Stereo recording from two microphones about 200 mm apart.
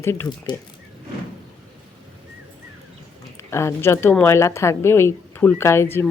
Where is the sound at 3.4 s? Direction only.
15° left (ahead or behind).